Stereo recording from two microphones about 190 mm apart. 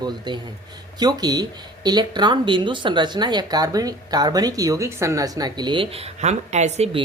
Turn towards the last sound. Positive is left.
turn(degrees=-30)  # may be behind; listen again after turning